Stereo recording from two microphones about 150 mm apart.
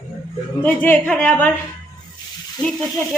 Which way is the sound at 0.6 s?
10° left (ahead or behind).